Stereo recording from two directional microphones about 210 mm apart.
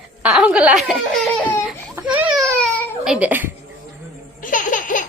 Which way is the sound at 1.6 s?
10° right (ahead or behind).